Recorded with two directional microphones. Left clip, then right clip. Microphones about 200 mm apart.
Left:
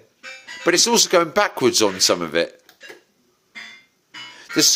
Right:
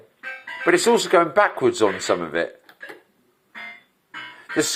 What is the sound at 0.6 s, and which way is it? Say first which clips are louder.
Speech: left 1 dB; 75° left (ahead or behind).